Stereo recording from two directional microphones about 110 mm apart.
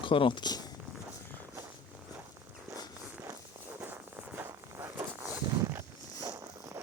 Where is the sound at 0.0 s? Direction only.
50° left (ahead or behind).